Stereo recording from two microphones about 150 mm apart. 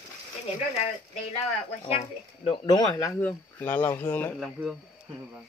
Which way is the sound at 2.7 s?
25° left (ahead or behind).